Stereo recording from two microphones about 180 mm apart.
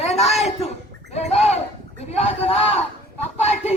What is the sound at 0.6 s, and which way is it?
Speech, 35° left (ahead or behind).